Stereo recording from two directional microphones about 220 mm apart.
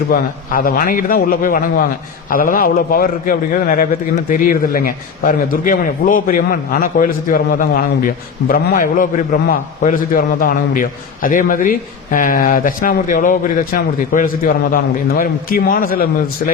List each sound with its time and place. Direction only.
0.1 s a man's voice: 40° left (ahead or behind)